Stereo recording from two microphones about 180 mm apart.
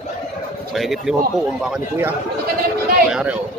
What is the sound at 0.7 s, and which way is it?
A man's voice, centre (ahead or behind).